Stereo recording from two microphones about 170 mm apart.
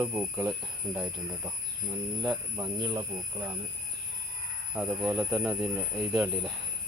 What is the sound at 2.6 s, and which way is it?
Speech, 15° right (ahead or behind).